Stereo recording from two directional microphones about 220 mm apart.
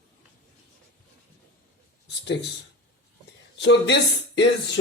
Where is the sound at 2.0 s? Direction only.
50° left (ahead or behind).